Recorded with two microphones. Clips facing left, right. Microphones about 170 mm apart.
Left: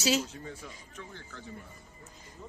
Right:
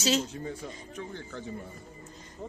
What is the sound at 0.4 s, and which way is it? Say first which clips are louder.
Speech: right 6 dB; 35° right (ahead or behind).